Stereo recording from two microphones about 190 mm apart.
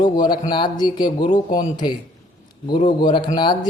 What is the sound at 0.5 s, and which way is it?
Speech, 25° left (ahead or behind).